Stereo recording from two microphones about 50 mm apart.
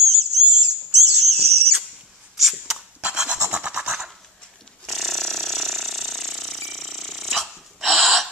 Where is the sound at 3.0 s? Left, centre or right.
Right.